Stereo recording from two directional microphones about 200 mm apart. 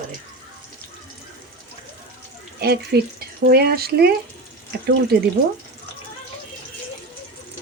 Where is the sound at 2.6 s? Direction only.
50° right (ahead or behind).